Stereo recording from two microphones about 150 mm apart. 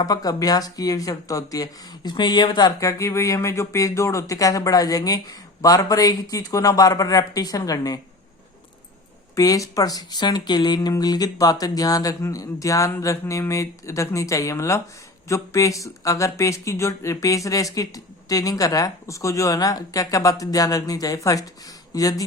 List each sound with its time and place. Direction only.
0.0 s speech: 25° left (ahead or behind)
9.3 s speech: 20° left (ahead or behind)